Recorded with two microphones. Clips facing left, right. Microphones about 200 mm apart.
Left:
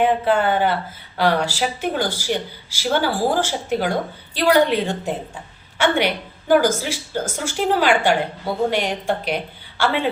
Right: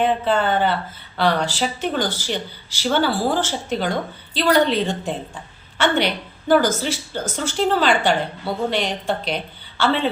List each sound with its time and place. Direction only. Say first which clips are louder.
0.0 s a woman's voice: left 2 dB; 10° left (ahead or behind)